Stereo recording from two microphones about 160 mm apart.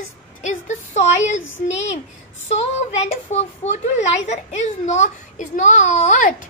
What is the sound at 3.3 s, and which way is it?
A woman's voice, 45° left (ahead or behind).